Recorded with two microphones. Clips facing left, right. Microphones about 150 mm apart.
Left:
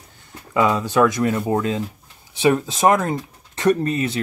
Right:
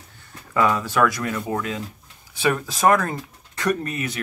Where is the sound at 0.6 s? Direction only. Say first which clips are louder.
Left 3 dB; 20° left (ahead or behind).